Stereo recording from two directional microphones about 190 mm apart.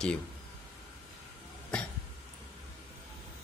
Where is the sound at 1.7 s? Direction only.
5° left (ahead or behind).